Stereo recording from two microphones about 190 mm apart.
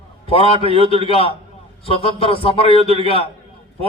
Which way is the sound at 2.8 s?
30° right (ahead or behind).